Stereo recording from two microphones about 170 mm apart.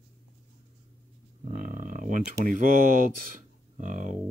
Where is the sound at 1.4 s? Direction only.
55° right (ahead or behind).